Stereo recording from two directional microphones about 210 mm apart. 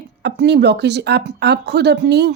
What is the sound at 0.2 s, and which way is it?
Speech, 55° right (ahead or behind).